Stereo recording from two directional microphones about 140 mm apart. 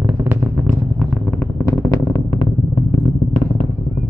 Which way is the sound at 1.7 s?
30° left (ahead or behind).